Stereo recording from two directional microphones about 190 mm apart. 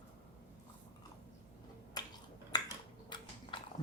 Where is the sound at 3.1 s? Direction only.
25° left (ahead or behind).